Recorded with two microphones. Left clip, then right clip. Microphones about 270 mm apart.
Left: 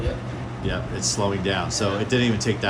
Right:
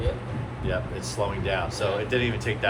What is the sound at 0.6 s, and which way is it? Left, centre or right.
Speech, left.